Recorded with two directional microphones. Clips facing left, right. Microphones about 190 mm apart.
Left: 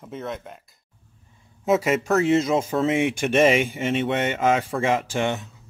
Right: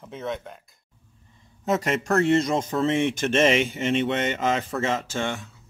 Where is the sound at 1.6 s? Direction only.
5° left (ahead or behind).